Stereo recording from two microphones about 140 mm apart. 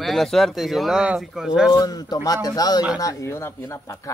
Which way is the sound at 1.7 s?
25° left (ahead or behind).